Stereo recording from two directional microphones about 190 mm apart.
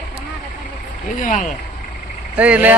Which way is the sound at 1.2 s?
40° left (ahead or behind).